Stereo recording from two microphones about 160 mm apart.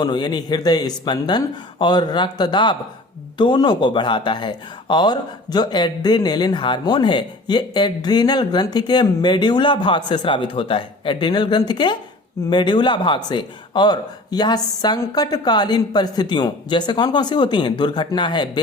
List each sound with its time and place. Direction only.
0.0 s speech: 30° left (ahead or behind)